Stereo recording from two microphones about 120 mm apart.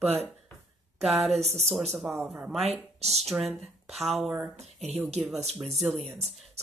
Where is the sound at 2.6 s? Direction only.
60° right (ahead or behind).